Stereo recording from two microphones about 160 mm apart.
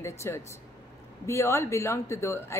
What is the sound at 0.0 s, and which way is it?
Speech, 15° left (ahead or behind).